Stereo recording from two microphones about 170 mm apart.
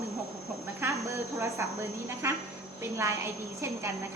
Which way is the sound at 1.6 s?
15° right (ahead or behind).